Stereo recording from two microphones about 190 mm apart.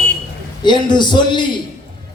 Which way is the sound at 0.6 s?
25° left (ahead or behind).